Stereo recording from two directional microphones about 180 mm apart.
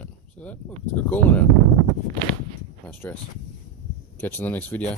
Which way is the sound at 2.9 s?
10° left (ahead or behind).